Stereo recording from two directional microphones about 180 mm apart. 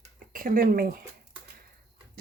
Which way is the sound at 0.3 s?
50° right (ahead or behind).